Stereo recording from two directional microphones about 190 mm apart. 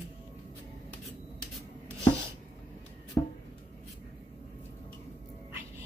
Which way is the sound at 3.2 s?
15° left (ahead or behind).